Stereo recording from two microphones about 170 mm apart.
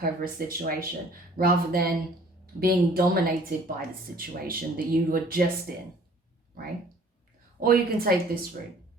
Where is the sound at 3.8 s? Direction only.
60° right (ahead or behind).